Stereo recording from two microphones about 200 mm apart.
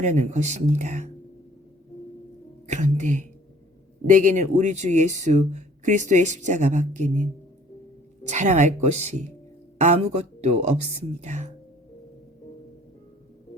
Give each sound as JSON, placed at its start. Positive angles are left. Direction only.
{"t": 0.0, "sound": "speech", "side_deg": -35}
{"t": 2.6, "sound": "speech", "side_deg": -35}
{"t": 8.3, "sound": "speech", "side_deg": -35}
{"t": 11.2, "sound": "music", "side_deg": -35}